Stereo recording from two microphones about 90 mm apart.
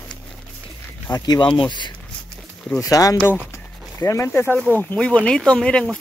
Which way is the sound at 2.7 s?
40° left (ahead or behind).